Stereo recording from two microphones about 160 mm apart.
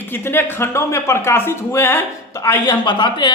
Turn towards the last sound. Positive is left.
turn(degrees=30)  # may be behind; listen again after turning